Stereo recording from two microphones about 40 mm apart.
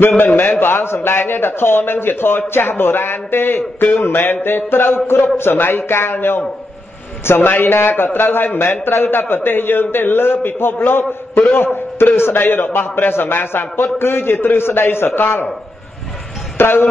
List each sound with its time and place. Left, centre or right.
0.4 s a man's voice: left
7.2 s a man's voice: left
16.5 s speech: left